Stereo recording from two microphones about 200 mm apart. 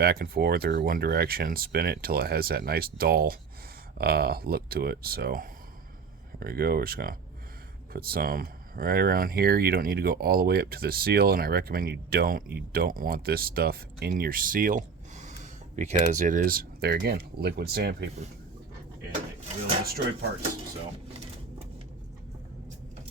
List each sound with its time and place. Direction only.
0.0 s speech: 50° right (ahead or behind)